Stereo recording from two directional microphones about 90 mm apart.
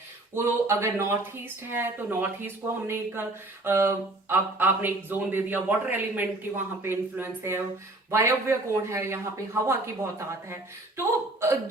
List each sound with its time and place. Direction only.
0.3 s speech: 30° right (ahead or behind)
1.7 s a sound: 25° right (ahead or behind)
8.1 s speech: 30° right (ahead or behind)